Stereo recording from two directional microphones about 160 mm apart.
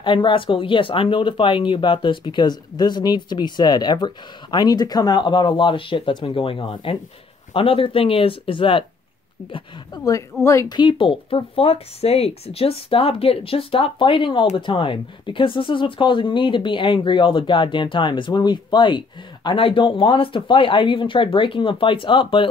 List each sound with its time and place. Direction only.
0.0 s speech: 30° left (ahead or behind)